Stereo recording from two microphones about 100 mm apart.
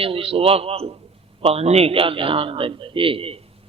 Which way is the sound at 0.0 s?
70° right (ahead or behind).